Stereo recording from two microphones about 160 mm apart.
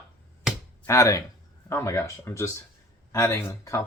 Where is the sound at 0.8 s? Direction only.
20° left (ahead or behind).